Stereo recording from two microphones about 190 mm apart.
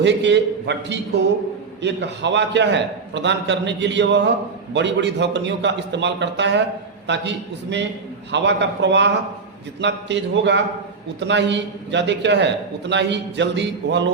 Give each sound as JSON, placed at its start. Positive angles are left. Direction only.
{"t": 0.0, "sound": "a man's voice", "side_deg": -70}